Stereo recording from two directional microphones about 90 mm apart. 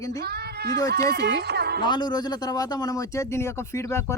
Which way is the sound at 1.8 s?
55° left (ahead or behind).